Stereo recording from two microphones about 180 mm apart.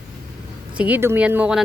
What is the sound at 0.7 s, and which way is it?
Speech, 10° right (ahead or behind).